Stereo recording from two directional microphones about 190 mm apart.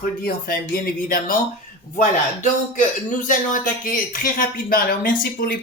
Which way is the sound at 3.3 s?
45° left (ahead or behind).